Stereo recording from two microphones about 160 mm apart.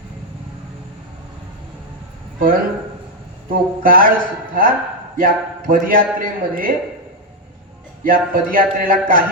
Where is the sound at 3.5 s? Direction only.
65° right (ahead or behind).